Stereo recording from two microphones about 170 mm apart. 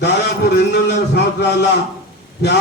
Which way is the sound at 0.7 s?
90° left.